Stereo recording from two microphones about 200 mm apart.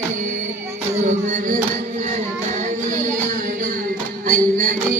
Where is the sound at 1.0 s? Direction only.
35° right (ahead or behind).